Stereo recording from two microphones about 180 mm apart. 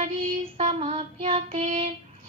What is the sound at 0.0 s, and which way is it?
Child singing, 35° right (ahead or behind).